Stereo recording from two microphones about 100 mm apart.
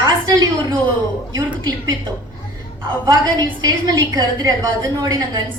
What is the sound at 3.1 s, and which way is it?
A woman's voice, 40° right (ahead or behind).